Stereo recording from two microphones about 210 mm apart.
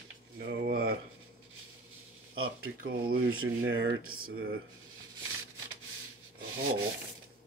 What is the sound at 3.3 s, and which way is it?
Speech, 70° right (ahead or behind).